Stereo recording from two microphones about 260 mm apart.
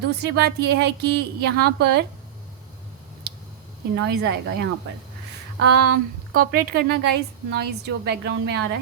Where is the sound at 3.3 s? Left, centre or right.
Right.